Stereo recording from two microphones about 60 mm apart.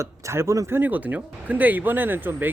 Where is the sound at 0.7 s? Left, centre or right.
Right.